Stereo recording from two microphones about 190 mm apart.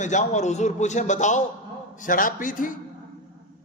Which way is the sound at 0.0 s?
40° left (ahead or behind).